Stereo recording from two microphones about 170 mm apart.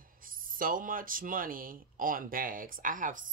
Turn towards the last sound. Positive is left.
turn(degrees=-50)  # may be behind; listen again after turning